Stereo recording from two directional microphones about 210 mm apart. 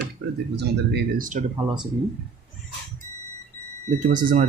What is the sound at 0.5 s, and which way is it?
Speech, 55° right (ahead or behind).